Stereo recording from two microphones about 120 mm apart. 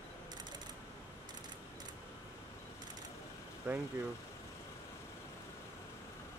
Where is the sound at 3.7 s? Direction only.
15° right (ahead or behind).